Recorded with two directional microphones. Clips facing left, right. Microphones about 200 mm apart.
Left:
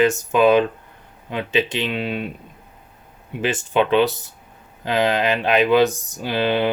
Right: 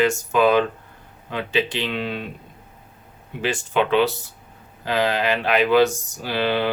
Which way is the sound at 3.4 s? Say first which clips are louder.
Left 2 dB; 20° left (ahead or behind).